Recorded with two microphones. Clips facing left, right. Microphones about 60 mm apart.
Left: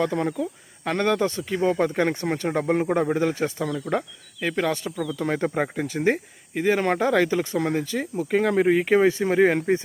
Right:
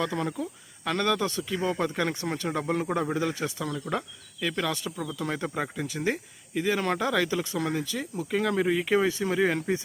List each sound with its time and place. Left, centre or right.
0.0 s speech: left